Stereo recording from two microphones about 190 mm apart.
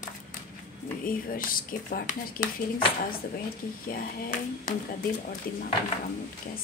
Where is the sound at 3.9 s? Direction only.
45° left (ahead or behind).